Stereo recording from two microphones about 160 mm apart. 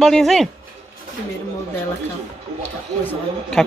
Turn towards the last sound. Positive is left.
turn(degrees=5)  # may be behind; listen again after turning